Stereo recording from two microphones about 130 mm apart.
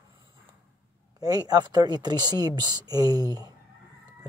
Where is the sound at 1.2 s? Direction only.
30° right (ahead or behind).